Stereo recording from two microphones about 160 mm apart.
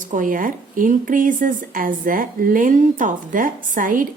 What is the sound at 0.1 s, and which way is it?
Speech, 55° right (ahead or behind).